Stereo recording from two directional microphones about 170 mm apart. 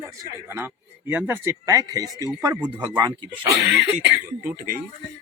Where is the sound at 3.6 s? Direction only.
90° right.